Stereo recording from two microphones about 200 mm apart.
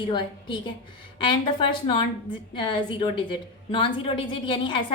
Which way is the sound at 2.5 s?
25° left (ahead or behind).